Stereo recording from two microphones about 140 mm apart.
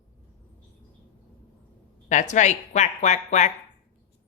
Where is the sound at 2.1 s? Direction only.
60° left (ahead or behind).